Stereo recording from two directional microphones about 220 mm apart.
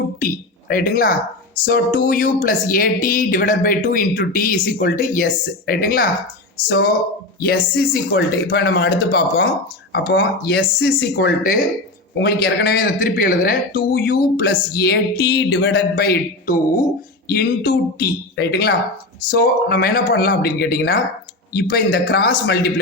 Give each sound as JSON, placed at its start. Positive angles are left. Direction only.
{"t": 0.2, "sound": "speech", "side_deg": 40}